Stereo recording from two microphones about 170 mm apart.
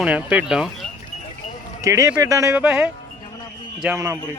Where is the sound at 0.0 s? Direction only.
10° right (ahead or behind).